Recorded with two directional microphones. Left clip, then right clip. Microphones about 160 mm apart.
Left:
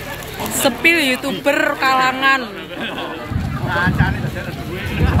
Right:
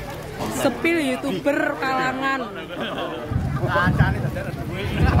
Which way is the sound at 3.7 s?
70° right (ahead or behind).